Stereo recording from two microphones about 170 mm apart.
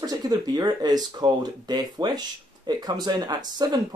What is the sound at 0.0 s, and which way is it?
Speech, 20° right (ahead or behind).